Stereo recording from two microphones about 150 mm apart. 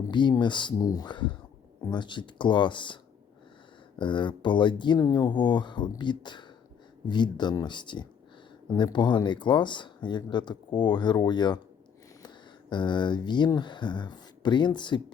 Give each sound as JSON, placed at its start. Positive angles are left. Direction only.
{"t": 0.1, "sound": "speech", "side_deg": 30}
{"t": 12.7, "sound": "speech", "side_deg": 30}